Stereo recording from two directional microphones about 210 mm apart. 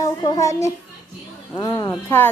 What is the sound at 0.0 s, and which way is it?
A child's voice, 15° left (ahead or behind).